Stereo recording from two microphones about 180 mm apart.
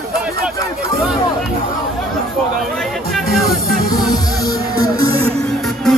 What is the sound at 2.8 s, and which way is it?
Music, centre (ahead or behind).